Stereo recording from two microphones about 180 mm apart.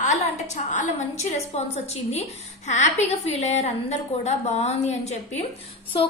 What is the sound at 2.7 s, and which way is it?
A woman's voice, 40° left (ahead or behind).